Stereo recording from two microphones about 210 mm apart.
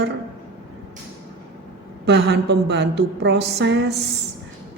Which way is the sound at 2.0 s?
50° right (ahead or behind).